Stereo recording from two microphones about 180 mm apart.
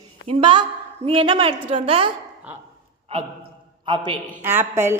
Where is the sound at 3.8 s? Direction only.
25° right (ahead or behind).